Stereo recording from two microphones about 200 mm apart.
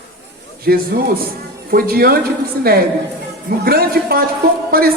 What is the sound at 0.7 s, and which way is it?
A woman's voice, 50° right (ahead or behind).